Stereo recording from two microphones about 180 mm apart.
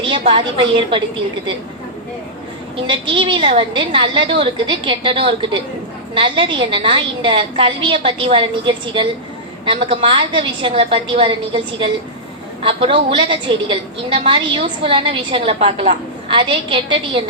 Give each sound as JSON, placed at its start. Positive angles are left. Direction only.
{"t": 0.1, "sound": "a woman's voice", "side_deg": -30}
{"t": 2.8, "sound": "a woman's voice", "side_deg": -25}